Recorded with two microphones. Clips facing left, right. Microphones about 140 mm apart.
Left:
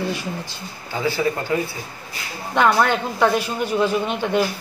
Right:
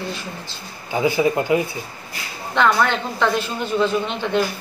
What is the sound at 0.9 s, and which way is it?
Speech, 15° right (ahead or behind).